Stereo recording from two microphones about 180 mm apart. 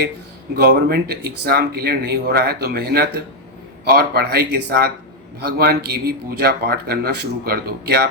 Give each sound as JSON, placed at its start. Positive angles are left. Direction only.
{"t": 0.5, "sound": "speech", "side_deg": -60}